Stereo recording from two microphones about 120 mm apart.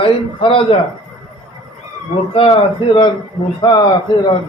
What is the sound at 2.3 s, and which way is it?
A man's voice, 50° left (ahead or behind).